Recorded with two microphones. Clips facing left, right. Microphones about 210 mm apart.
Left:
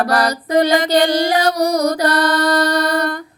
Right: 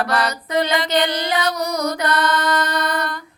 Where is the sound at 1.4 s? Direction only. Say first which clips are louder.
Left 6 dB; 35° left (ahead or behind).